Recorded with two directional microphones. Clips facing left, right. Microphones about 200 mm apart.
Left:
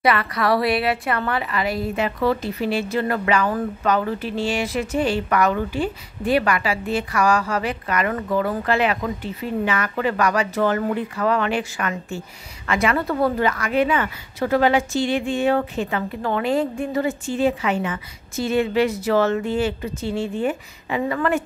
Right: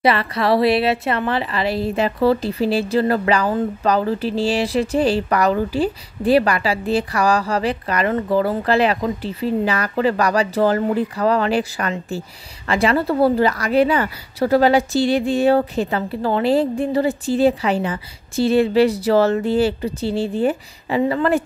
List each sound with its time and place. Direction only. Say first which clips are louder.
0.0 s a woman's voice: right 2 dB; 25° right (ahead or behind)